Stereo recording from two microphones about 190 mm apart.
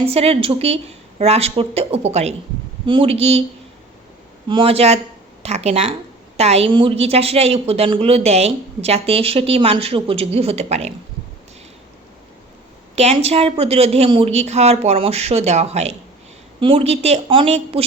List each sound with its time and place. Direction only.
0.0 s a woman's voice: 30° right (ahead or behind)
4.4 s a woman's voice: 25° right (ahead or behind)
13.0 s a woman's voice: 35° right (ahead or behind)